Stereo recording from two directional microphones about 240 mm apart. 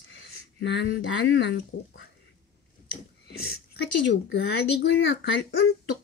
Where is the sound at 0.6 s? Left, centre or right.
Left.